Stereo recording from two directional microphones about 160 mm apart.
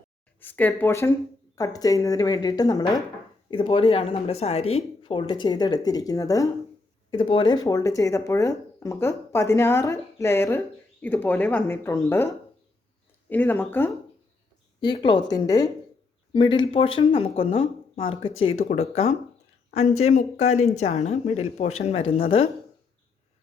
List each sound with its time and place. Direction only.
0.3 s a woman's voice: 10° left (ahead or behind)
7.1 s speech: 30° left (ahead or behind); by 13.9 s 10° left (ahead or behind)
14.8 s a woman's voice: 25° left (ahead or behind)